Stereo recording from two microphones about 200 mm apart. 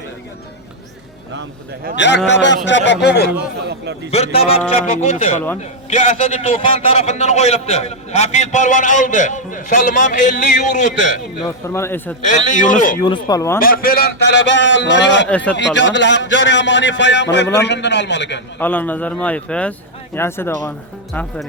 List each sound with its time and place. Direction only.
2.0 s a man's voice: 60° left (ahead or behind)
3.7 s a sound: 55° right (ahead or behind)
4.1 s a man's voice: 30° left (ahead or behind)
11.4 s speech: 15° left (ahead or behind)
12.2 s a man's voice: 40° left (ahead or behind)
13.1 s speech: 20° left (ahead or behind)
13.6 s a man's voice: 45° left (ahead or behind); by 15.3 s 65° left (ahead or behind)
15.3 s speech: 5° left (ahead or behind)
15.5 s a man's voice: 65° left (ahead or behind)
18.6 s speech: 10° left (ahead or behind)